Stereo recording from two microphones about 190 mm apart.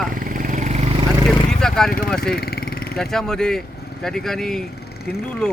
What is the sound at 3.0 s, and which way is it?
A man's voice, centre (ahead or behind).